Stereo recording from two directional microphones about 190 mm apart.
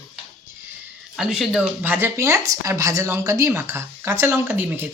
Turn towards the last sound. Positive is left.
turn(degrees=-10)  # may be behind; listen again after turning